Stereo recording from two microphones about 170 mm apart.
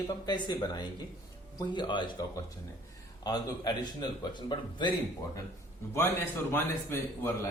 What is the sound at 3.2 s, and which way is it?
A man's voice, 25° left (ahead or behind).